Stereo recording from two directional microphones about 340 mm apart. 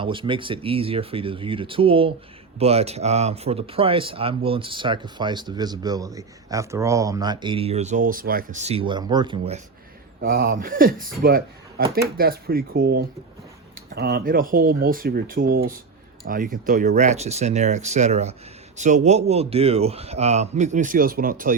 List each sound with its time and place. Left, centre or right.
0.0 s speech: centre